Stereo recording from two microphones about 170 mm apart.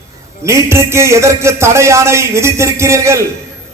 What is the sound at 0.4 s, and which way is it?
A man's voice, 15° right (ahead or behind).